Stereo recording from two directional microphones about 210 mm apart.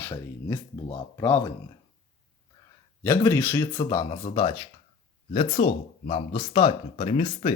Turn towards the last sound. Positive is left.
turn(degrees=25)  # may be behind; listen again after turning